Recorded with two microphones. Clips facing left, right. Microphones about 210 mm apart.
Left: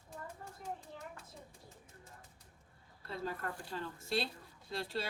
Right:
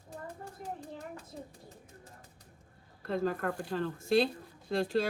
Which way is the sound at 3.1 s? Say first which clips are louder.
Right 10 dB; 55° right (ahead or behind).